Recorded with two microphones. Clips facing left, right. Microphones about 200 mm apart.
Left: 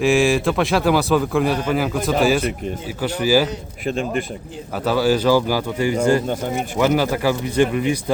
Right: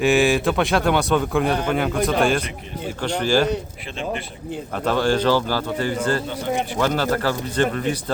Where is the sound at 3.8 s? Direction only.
45° left (ahead or behind).